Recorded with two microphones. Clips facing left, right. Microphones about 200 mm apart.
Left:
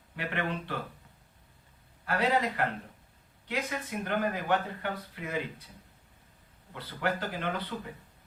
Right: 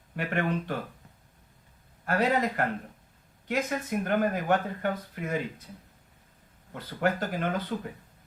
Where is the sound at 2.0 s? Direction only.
45° right (ahead or behind).